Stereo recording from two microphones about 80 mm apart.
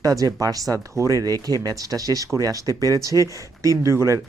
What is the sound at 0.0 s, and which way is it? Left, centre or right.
Speech, right.